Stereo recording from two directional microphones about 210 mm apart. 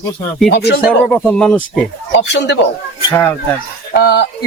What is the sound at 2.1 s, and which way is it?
Speech, 55° left (ahead or behind).